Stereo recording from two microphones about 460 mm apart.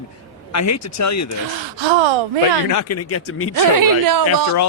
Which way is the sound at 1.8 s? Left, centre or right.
Right.